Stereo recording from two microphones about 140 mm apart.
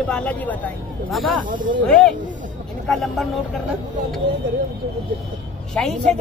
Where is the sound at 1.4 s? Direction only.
75° right (ahead or behind).